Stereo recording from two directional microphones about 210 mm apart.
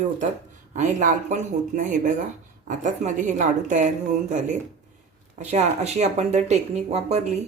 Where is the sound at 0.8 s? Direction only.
35° right (ahead or behind).